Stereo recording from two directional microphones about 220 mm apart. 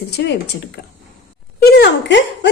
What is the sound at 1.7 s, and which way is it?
Speech, 50° left (ahead or behind).